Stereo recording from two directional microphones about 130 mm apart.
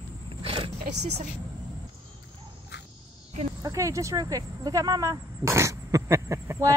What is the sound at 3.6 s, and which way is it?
Speech, 25° right (ahead or behind).